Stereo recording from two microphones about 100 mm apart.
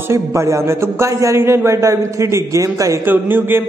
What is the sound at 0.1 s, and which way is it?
A man's voice, 30° right (ahead or behind).